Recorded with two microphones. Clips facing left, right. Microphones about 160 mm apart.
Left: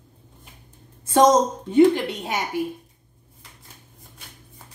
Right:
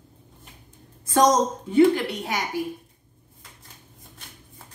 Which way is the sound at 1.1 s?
25° left (ahead or behind).